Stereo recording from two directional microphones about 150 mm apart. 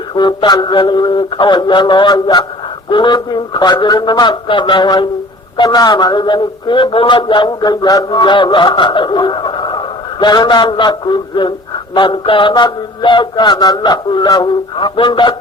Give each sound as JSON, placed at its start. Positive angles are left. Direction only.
{"t": 0.1, "sound": "a man's voice", "side_deg": 30}